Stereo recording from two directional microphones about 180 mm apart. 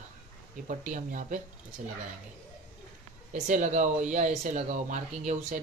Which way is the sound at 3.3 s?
45° right (ahead or behind).